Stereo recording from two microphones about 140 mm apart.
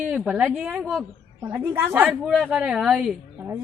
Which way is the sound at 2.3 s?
Centre (ahead or behind).